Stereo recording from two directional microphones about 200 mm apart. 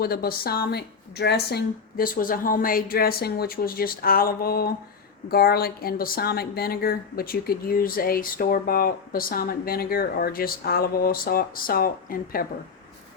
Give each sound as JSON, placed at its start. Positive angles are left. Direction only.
{"t": 0.0, "sound": "speech", "side_deg": 50}